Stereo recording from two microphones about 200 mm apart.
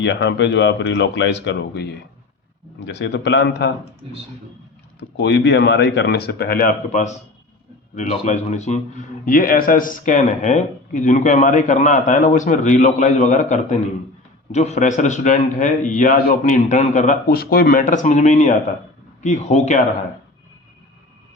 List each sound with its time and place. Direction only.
0.0 s speech: 60° left (ahead or behind)
5.2 s speech: 55° left (ahead or behind); by 8.8 s 35° left (ahead or behind)
9.2 s speech: 45° left (ahead or behind)